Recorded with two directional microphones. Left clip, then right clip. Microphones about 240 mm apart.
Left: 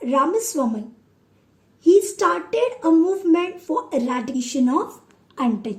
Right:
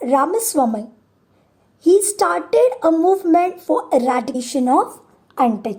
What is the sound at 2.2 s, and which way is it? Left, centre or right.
Speech, right.